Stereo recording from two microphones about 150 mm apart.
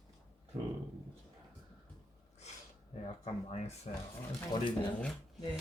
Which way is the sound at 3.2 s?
45° left (ahead or behind).